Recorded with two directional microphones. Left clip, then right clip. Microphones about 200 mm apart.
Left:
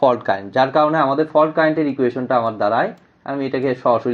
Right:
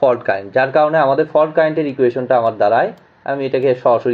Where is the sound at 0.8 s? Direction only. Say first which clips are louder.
Right 3 dB; 30° left (ahead or behind).